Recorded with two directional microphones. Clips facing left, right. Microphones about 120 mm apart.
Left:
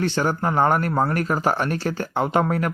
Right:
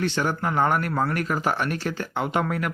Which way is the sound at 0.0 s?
35° left (ahead or behind).